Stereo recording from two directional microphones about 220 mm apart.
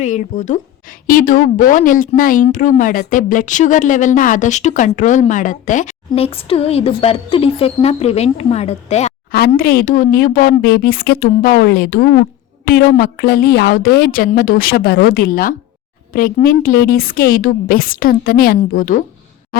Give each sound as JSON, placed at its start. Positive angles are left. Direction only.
{"t": 0.0, "sound": "a woman's voice", "side_deg": 35}
{"t": 9.3, "sound": "a woman's voice", "side_deg": 45}